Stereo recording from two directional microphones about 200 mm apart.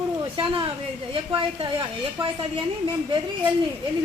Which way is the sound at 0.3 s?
25° right (ahead or behind).